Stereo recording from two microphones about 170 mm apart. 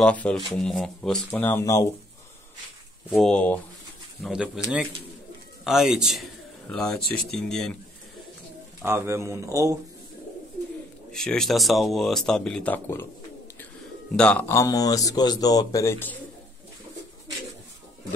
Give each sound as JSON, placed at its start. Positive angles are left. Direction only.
{"t": 0.0, "sound": "speech", "side_deg": 5}
{"t": 1.3, "sound": "speech", "side_deg": 15}
{"t": 3.1, "sound": "speech", "side_deg": 5}
{"t": 4.3, "sound": "speech", "side_deg": -5}
{"t": 8.8, "sound": "speech", "side_deg": -15}
{"t": 11.1, "sound": "speech", "side_deg": 5}
{"t": 14.1, "sound": "speech", "side_deg": 5}
{"t": 14.5, "sound": "speech", "side_deg": 20}